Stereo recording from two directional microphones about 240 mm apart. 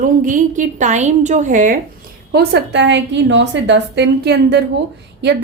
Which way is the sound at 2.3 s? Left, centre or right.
Right.